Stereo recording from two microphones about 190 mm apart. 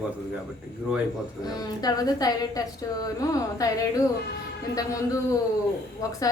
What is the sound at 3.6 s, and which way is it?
A woman's voice, 20° left (ahead or behind).